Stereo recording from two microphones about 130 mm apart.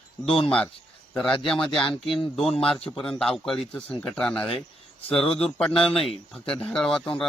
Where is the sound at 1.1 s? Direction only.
5° left (ahead or behind).